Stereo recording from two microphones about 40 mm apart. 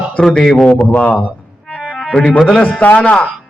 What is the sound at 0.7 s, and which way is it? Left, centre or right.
Speech, left.